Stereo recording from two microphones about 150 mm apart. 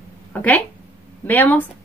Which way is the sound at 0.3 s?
10° left (ahead or behind).